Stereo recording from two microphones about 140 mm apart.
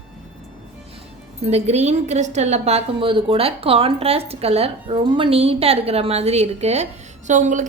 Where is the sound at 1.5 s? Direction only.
50° right (ahead or behind).